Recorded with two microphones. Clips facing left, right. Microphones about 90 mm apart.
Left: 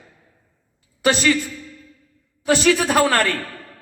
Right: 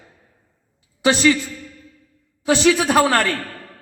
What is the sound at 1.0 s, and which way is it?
A man's voice, 20° right (ahead or behind).